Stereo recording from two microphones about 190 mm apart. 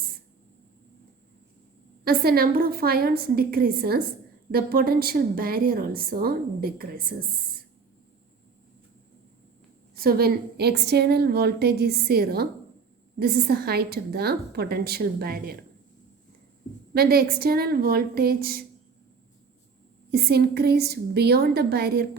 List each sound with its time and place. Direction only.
2.0 s a woman's voice: 50° right (ahead or behind)
10.0 s a woman's voice: 55° right (ahead or behind)
16.9 s a woman's voice: 55° right (ahead or behind)
20.1 s a woman's voice: 55° right (ahead or behind)